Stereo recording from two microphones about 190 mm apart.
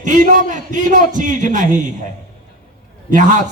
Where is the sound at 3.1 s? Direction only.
40° right (ahead or behind).